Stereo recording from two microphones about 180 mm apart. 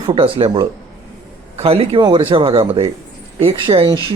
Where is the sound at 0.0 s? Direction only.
30° right (ahead or behind).